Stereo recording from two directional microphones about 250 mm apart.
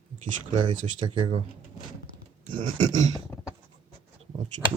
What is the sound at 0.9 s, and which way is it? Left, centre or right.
Speech, centre.